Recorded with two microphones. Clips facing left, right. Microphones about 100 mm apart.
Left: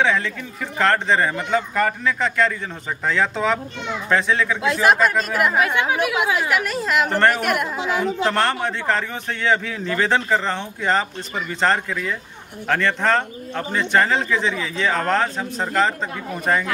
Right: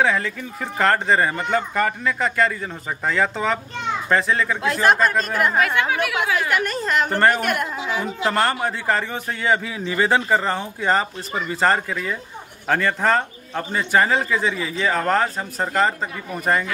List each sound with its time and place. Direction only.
0.0 s a woman's voice: 5° right (ahead or behind)
5.6 s a woman's voice: 15° left (ahead or behind)
6.5 s a woman's voice: centre (ahead or behind)